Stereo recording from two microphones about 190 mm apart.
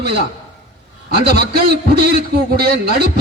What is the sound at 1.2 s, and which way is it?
A man's voice, 55° right (ahead or behind).